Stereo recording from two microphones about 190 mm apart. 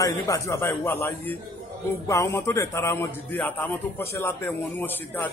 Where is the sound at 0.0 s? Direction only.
15° left (ahead or behind).